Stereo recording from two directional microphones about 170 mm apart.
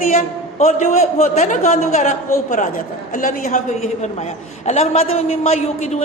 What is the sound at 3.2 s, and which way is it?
A man's voice, 50° left (ahead or behind).